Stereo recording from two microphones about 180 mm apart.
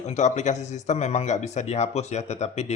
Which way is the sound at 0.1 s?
40° left (ahead or behind).